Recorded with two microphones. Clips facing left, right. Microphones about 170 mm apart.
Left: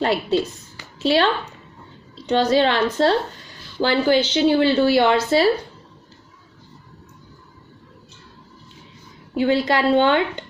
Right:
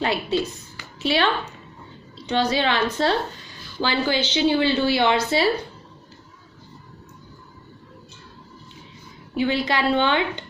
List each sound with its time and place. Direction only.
0.0 s a woman's voice: 40° left (ahead or behind)
9.4 s a woman's voice: 45° left (ahead or behind)